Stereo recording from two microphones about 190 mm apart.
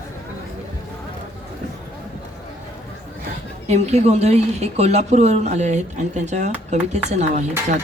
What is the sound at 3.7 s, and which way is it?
Speech, 35° right (ahead or behind).